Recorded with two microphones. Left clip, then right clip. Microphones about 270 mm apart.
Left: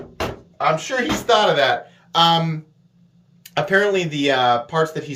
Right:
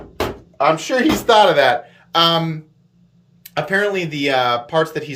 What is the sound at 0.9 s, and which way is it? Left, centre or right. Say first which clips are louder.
Speech: right 5 dB; right.